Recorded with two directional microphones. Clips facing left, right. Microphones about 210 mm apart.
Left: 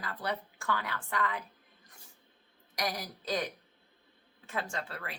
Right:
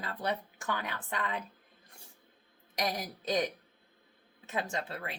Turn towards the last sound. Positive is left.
turn(degrees=-20)  # may be behind; listen again after turning